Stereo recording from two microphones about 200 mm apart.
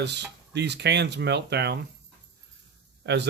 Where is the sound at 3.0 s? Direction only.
60° right (ahead or behind).